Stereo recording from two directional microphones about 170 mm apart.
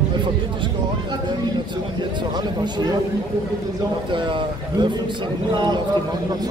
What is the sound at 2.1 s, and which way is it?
Speech, 25° right (ahead or behind).